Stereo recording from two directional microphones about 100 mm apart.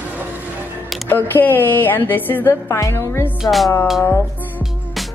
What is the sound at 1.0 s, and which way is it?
Speech, 20° left (ahead or behind).